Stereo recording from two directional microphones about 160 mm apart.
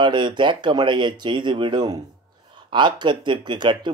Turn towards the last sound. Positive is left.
turn(degrees=-30)  # may be behind; listen again after turning